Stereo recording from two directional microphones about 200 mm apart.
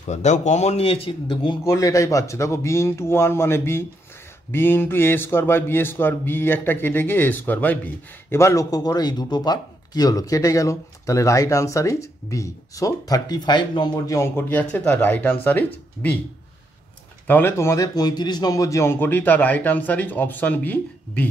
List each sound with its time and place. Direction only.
0.0 s a man's voice: 35° left (ahead or behind); by 16.2 s 10° left (ahead or behind)
17.3 s a man's voice: 10° left (ahead or behind)